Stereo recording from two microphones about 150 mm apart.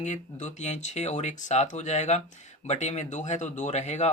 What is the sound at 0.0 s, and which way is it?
Speech, 55° left (ahead or behind).